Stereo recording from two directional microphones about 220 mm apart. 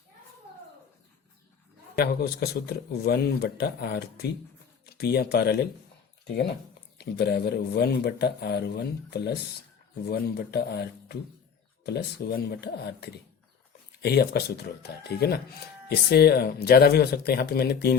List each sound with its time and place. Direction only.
2.0 s speech: 45° left (ahead or behind)